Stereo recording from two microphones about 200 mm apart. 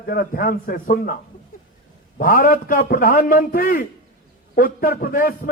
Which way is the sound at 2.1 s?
45° left (ahead or behind).